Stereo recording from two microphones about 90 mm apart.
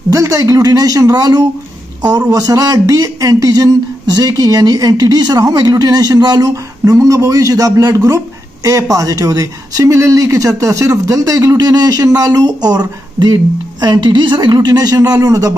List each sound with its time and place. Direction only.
0.1 s speech: 40° right (ahead or behind)